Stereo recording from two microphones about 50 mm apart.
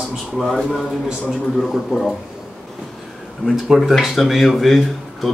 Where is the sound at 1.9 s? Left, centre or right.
Centre.